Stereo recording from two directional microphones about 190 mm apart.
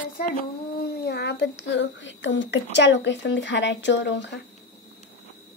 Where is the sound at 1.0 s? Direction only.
60° left (ahead or behind).